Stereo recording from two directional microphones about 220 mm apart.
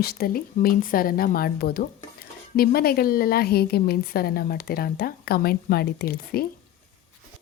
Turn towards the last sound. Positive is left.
turn(degrees=45)  # may be behind; listen again after turning